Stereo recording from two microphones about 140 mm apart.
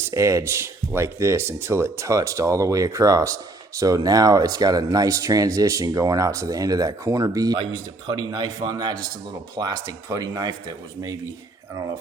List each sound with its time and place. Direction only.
0.0 s speech: 20° right (ahead or behind)